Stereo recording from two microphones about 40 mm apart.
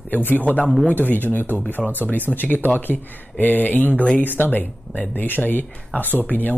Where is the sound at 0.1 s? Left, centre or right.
Left.